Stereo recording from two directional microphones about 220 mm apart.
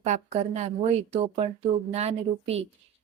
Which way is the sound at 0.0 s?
30° right (ahead or behind).